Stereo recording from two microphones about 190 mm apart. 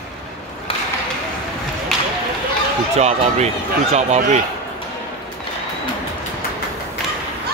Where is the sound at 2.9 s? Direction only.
35° right (ahead or behind).